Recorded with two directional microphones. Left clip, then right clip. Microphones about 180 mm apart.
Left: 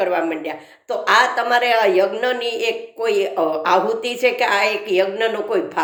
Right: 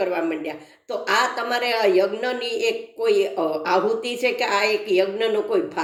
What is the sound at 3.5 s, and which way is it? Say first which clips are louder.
Speech: left 5 dB; 45° left (ahead or behind).